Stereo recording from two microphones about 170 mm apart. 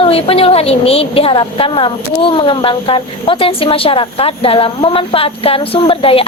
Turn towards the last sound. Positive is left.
turn(degrees=35)  # may be behind; listen again after turning